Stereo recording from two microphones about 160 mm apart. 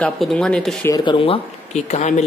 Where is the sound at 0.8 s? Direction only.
25° left (ahead or behind).